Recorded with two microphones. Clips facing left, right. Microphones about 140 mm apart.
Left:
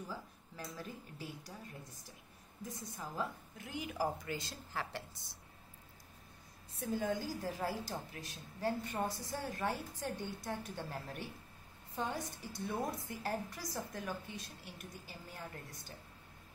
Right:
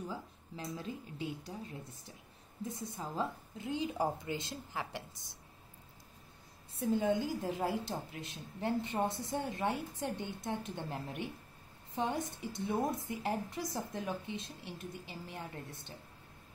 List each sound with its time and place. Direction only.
0.7 s a woman's voice: 20° right (ahead or behind)
2.7 s a woman's voice: 25° right (ahead or behind)
6.9 s a woman's voice: 20° right (ahead or behind)